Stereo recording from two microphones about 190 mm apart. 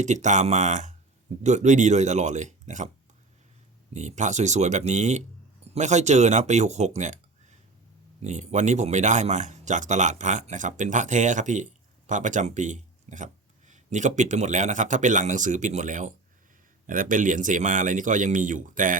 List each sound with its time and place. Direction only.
0.0 s speech: 40° right (ahead or behind)
3.9 s speech: 40° right (ahead or behind)
8.2 s a man's voice: 40° right (ahead or behind)